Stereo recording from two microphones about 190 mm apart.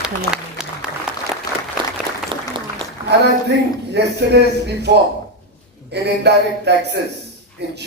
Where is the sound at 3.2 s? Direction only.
60° right (ahead or behind).